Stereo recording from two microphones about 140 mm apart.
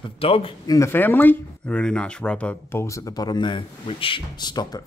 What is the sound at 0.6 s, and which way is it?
Speech, 25° left (ahead or behind).